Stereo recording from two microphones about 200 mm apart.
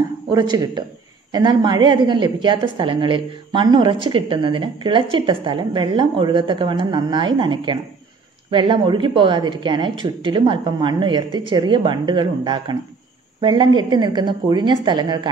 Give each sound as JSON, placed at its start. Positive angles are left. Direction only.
{"t": 0.3, "sound": "a woman's voice", "side_deg": -20}